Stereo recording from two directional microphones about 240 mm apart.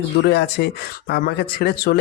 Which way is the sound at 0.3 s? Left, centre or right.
Left.